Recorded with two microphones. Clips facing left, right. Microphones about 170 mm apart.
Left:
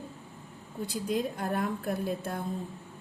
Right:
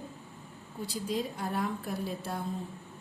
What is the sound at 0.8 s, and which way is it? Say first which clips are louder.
Speech: left 3 dB; 55° left (ahead or behind).